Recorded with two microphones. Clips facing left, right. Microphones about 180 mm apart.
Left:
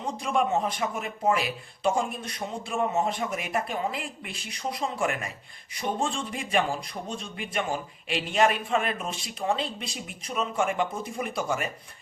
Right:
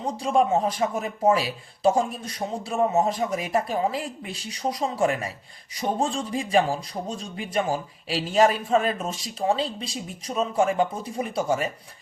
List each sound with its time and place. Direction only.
0.0 s speech: 35° right (ahead or behind)